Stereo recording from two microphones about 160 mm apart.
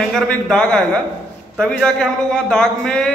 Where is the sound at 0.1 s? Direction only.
5° left (ahead or behind).